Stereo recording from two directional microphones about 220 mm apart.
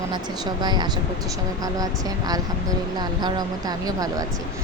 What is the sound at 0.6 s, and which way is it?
Speech, 20° right (ahead or behind).